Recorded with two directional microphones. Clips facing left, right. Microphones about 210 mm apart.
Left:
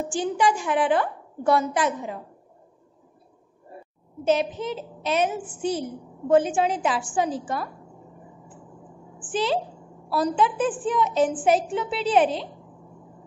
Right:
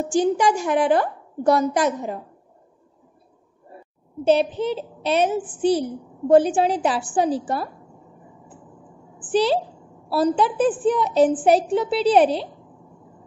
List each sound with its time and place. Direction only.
0.1 s a woman's voice: 40° right (ahead or behind)
4.2 s a woman's voice: 30° right (ahead or behind)
9.2 s a woman's voice: 35° right (ahead or behind)